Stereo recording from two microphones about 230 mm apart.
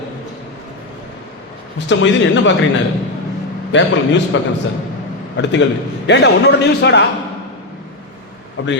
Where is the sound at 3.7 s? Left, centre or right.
Left.